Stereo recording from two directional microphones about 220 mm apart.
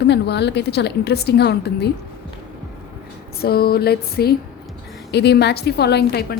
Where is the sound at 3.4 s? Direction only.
45° left (ahead or behind).